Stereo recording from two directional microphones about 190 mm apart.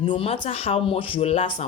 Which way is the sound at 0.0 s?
25° left (ahead or behind).